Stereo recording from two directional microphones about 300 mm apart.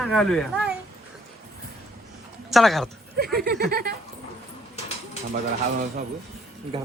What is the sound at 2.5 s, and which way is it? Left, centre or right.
Speech, centre.